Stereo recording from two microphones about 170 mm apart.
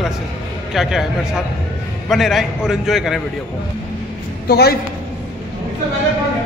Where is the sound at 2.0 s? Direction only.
Centre (ahead or behind).